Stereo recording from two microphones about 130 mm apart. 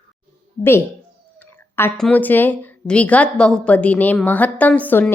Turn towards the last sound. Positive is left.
turn(degrees=10)  # may be behind; listen again after turning